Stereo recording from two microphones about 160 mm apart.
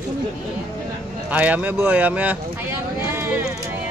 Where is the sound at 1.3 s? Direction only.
10° right (ahead or behind).